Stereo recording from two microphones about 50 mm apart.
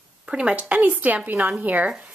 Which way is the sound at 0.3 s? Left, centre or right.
Right.